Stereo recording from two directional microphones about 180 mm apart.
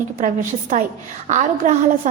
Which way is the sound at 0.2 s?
45° right (ahead or behind).